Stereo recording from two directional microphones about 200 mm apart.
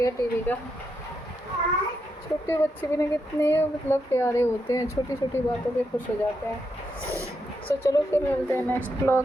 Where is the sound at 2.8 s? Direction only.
15° left (ahead or behind).